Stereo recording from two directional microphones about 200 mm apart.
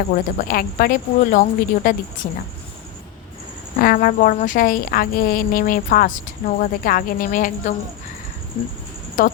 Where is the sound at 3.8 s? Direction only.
45° left (ahead or behind).